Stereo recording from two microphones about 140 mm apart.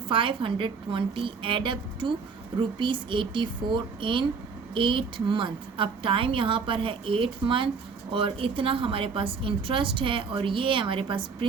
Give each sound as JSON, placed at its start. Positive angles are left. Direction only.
{"t": 0.1, "sound": "a woman's voice", "side_deg": -40}